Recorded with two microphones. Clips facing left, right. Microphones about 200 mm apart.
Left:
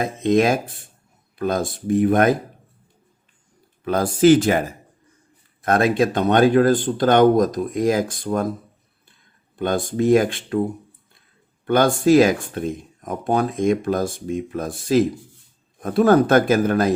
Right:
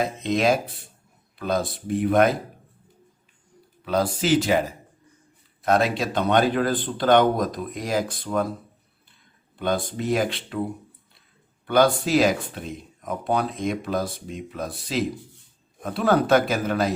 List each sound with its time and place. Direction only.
0.0 s speech: 50° left (ahead or behind)
3.8 s speech: 50° left (ahead or behind)
9.6 s speech: 50° left (ahead or behind)
11.6 s speech: 50° left (ahead or behind)